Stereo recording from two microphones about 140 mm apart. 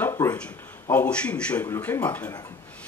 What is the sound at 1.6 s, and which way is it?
Speech, 25° left (ahead or behind).